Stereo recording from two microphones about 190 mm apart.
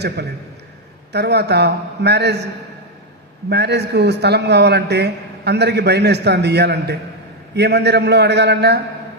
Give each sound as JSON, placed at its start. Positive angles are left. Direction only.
{"t": 0.2, "sound": "a man's voice", "side_deg": -60}
{"t": 3.5, "sound": "a man's voice", "side_deg": -60}